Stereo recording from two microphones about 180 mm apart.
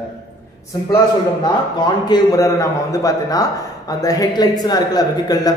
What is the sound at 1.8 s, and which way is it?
Speech, 25° left (ahead or behind).